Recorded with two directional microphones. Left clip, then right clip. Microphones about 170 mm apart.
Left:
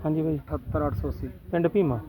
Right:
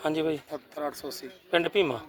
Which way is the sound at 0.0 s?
20° right (ahead or behind).